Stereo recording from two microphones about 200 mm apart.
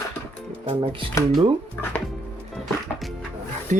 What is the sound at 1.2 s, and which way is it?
Speech, 15° left (ahead or behind).